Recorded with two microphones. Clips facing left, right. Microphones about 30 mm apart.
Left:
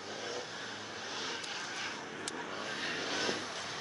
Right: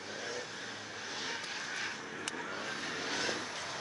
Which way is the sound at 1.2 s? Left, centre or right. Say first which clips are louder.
Right 1 dB; centre.